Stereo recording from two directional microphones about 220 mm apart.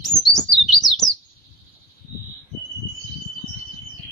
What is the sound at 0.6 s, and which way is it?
Bird, centre (ahead or behind).